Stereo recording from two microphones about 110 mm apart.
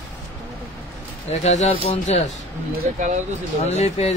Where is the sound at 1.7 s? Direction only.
70° left (ahead or behind).